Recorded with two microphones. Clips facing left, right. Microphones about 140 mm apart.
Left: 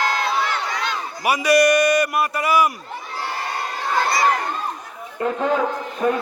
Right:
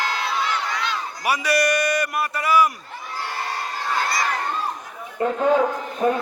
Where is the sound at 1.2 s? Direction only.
10° left (ahead or behind).